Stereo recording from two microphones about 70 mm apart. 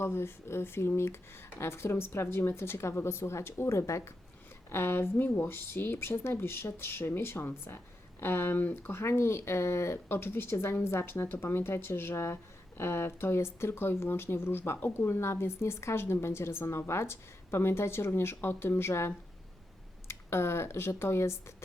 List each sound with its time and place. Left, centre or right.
0.0 s speech: left